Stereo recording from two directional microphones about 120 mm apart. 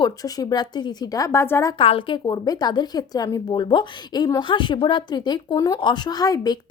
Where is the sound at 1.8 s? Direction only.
50° left (ahead or behind).